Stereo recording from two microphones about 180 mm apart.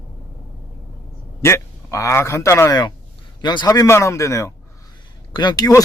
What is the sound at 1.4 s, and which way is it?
A man's voice, 15° left (ahead or behind).